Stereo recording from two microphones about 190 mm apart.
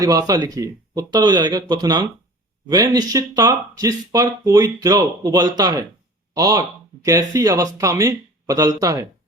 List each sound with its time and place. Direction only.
0.0 s speech: 20° right (ahead or behind)